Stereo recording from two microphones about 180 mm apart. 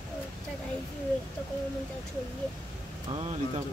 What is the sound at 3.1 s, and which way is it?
Speech, 35° right (ahead or behind).